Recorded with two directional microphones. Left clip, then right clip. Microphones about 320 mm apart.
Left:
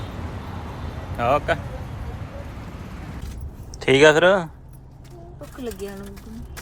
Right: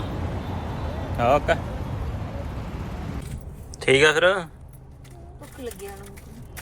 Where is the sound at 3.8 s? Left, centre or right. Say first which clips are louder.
Left 3 dB; centre.